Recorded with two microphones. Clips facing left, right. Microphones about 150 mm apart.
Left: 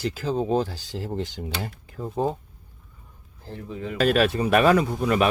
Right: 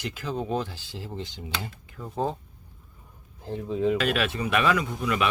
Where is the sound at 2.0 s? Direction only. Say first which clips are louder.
Left 6 dB; 35° left (ahead or behind).